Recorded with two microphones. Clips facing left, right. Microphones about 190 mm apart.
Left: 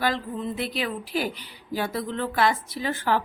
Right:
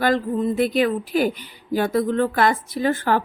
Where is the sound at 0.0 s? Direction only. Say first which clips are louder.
Right 7 dB; 45° right (ahead or behind).